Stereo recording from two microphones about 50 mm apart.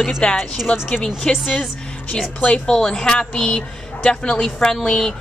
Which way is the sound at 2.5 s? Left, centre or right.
Centre.